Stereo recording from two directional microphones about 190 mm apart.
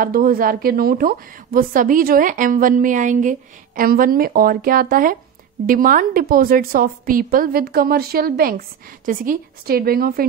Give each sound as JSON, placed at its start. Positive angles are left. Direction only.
{"t": 0.0, "sound": "a woman's voice", "side_deg": -50}